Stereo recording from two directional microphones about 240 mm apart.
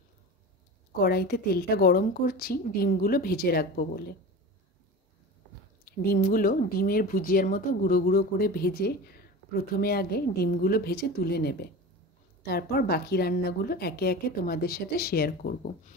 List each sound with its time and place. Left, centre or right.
0.9 s a woman's voice: left
5.9 s a woman's voice: left